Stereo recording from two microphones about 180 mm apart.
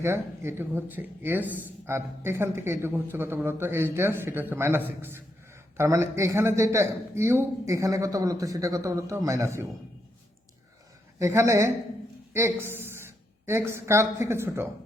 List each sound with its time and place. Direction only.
0.0 s speech: 15° right (ahead or behind)
11.2 s a woman's voice: 15° right (ahead or behind)